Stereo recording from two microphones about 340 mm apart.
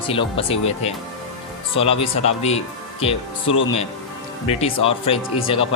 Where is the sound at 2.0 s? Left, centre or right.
Centre.